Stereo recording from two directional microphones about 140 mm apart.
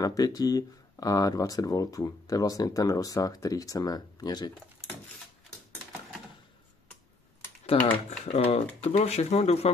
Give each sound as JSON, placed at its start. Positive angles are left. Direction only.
{"t": 0.0, "sound": "speech", "side_deg": 25}
{"t": 7.7, "sound": "speech", "side_deg": 40}